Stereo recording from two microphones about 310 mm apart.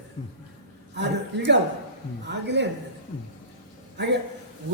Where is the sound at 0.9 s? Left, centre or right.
Right.